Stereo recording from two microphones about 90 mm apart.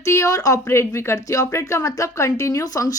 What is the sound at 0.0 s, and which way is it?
A woman's voice, 35° left (ahead or behind).